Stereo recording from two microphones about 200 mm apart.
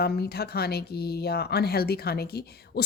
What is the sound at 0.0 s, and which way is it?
Speech, 50° left (ahead or behind).